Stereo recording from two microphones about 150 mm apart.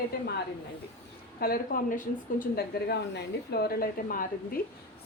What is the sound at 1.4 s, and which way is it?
A woman's voice, 75° left (ahead or behind).